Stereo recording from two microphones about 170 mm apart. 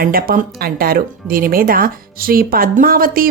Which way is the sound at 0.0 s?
60° right (ahead or behind).